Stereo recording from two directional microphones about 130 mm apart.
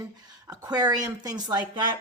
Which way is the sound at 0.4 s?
30° right (ahead or behind).